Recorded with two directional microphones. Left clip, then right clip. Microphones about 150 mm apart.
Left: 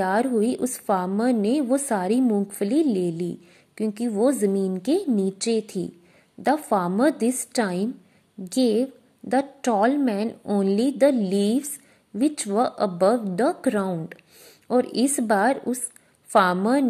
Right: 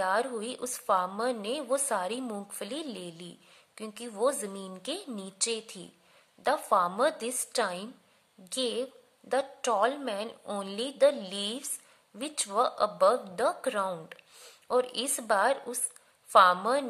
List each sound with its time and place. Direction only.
0.0 s a woman's voice: 25° left (ahead or behind)